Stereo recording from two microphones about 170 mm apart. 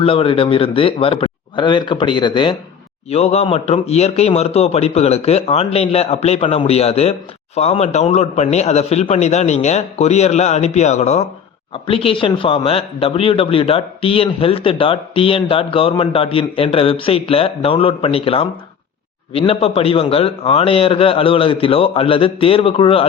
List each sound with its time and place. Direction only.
0.0 s a man's voice: 35° left (ahead or behind)
3.1 s a man's voice: 40° left (ahead or behind)